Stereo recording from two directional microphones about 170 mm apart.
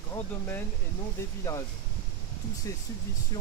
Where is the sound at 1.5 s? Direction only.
20° left (ahead or behind).